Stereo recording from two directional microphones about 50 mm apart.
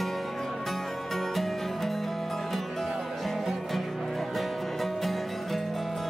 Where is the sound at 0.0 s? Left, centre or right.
Centre.